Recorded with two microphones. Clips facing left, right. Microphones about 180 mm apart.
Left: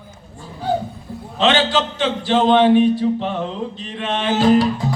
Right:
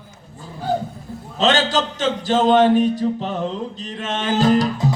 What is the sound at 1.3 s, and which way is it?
A man's voice, 40° right (ahead or behind).